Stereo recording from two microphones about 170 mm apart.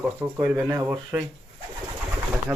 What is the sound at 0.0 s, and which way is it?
Speech, 10° right (ahead or behind).